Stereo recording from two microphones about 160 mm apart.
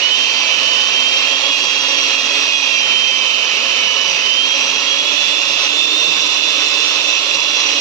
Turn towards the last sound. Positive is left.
turn(degrees=20)  # may be behind; listen again after turning